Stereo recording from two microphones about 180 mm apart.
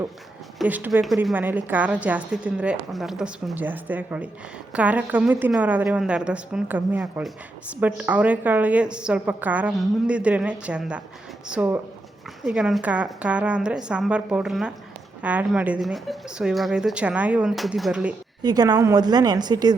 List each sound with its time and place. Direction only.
0.6 s a woman's voice: 5° right (ahead or behind)
18.4 s a woman's voice: 20° right (ahead or behind)